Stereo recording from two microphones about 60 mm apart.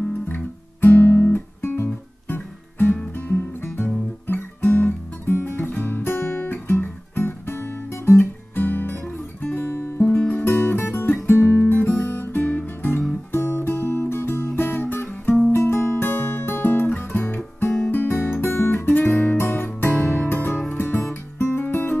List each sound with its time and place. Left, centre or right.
0.3 s guitar: left
2.2 s music: left
3.1 s guitar: left
4.3 s music: left
10.0 s music: left
10.4 s music: left
11.6 s guitar: left
13.3 s music: left
15.5 s music: left
17.9 s guitar: left
18.9 s music: left